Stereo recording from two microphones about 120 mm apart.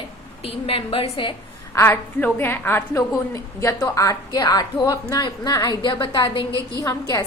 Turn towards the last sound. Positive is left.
turn(degrees=25)  # may be behind; listen again after turning